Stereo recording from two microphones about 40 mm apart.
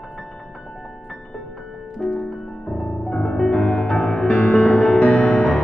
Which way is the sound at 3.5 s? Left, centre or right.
Left.